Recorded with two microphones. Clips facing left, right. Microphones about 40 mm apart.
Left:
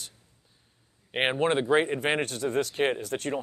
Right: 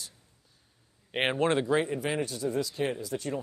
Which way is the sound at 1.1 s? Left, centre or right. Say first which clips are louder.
Left 1 dB; centre.